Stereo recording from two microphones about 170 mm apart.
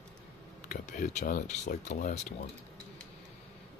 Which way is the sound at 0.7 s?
45° left (ahead or behind).